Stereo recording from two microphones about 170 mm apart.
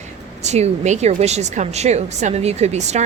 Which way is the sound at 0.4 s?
40° right (ahead or behind).